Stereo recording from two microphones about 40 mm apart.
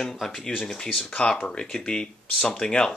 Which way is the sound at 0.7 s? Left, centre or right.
Centre.